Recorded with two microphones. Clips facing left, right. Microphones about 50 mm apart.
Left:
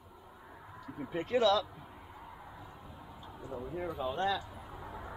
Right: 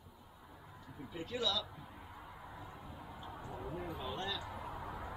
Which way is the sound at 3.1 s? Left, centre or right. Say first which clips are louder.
Left 1 dB; right.